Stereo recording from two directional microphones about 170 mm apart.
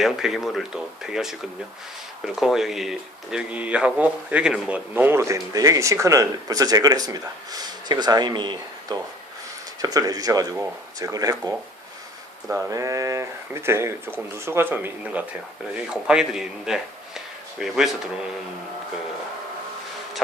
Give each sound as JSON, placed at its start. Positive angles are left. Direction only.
{"t": 0.0, "sound": "speech", "side_deg": 0}